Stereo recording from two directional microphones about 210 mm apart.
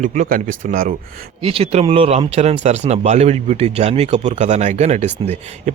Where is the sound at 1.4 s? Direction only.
25° right (ahead or behind).